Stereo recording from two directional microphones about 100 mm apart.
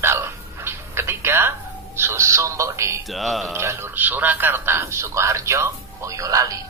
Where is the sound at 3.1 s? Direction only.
Centre (ahead or behind).